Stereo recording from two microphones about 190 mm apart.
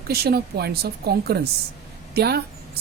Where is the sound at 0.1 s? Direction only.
55° right (ahead or behind).